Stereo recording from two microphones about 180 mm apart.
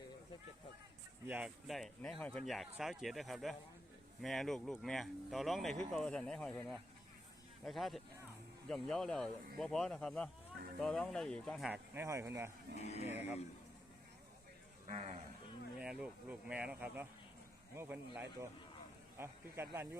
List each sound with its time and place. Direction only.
1.3 s speech: 5° right (ahead or behind)
11.9 s speech: 15° right (ahead or behind)
12.8 s speech: 35° left (ahead or behind)
14.8 s a man's voice: 40° right (ahead or behind)
15.8 s speech: 5° right (ahead or behind)